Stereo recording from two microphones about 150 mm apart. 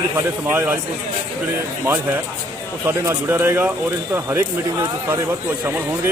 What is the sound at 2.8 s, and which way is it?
A man's voice, 15° right (ahead or behind).